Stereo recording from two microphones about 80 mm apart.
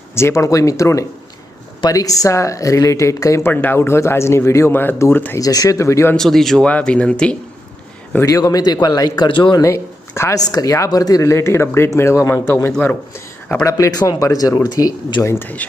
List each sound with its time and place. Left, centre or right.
0.1 s speech: left
3.5 s speech: left
5.4 s speech: left
6.1 s speech: centre
6.7 s speech: centre
8.2 s speech: left
9.3 s speech: left
9.6 s speech: left
10.4 s speech: left
12.8 s speech: left
13.7 s speech: left
15.2 s speech: left